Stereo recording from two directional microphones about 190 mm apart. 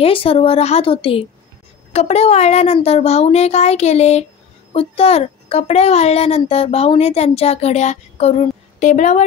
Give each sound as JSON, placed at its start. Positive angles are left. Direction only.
{"t": 0.0, "sound": "a woman's voice", "side_deg": 30}